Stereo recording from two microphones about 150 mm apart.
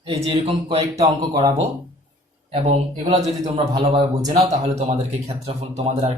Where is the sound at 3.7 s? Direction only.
25° right (ahead or behind).